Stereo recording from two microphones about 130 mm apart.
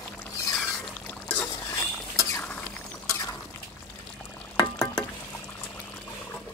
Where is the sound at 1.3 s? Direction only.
15° left (ahead or behind).